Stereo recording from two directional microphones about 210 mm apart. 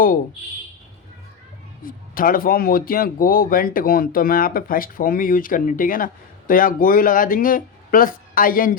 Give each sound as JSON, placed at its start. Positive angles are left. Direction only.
{"t": 1.8, "sound": "speech", "side_deg": 40}